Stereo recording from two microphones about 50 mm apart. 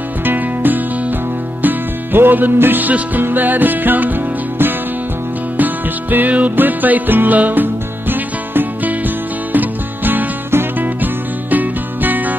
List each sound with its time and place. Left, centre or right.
0.2 s music: right
11.5 s music: right